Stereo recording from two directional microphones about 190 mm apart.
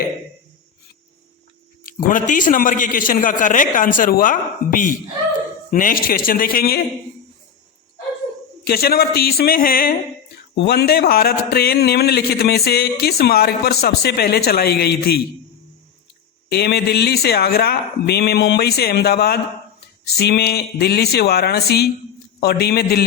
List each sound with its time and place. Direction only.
1.8 s a man's voice: 45° left (ahead or behind)
8.6 s a man's voice: 55° left (ahead or behind)
10.5 s a man's voice: 65° left (ahead or behind)
16.5 s a man's voice: 60° left (ahead or behind)